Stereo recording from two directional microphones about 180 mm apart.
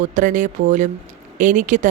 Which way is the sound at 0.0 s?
45° right (ahead or behind).